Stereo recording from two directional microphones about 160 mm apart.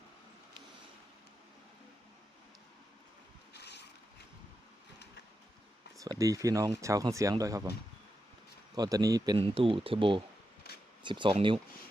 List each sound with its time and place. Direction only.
3.5 s a sound: 90° left
6.0 s speech: 20° right (ahead or behind)
8.7 s speech: 25° right (ahead or behind)